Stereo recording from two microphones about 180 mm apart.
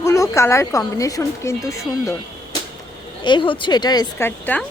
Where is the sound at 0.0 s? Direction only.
15° left (ahead or behind).